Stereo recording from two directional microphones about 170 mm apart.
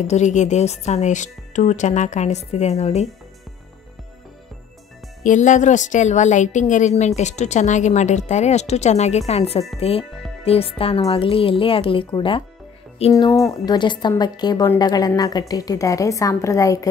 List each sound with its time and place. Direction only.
0.0 s speech: 45° left (ahead or behind)
5.2 s speech: 45° left (ahead or behind); by 12.4 s 30° left (ahead or behind)
13.3 s a woman's voice: 20° left (ahead or behind)